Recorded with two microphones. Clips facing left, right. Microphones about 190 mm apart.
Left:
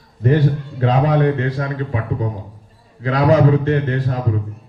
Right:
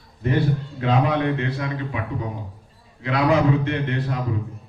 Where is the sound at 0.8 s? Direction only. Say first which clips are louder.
Left 5 dB; 40° left (ahead or behind).